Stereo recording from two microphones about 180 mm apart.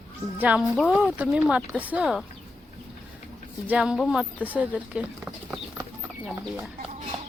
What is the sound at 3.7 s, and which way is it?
Speech, 5° right (ahead or behind).